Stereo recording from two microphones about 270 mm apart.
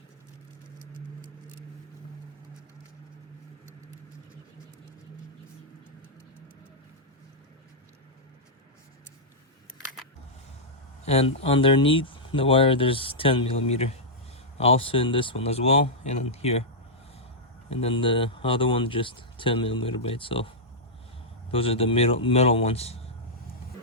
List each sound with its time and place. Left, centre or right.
11.0 s speech: left
17.7 s speech: left
21.5 s speech: left